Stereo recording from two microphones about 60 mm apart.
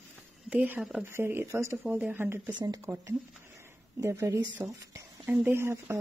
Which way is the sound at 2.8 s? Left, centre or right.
Right.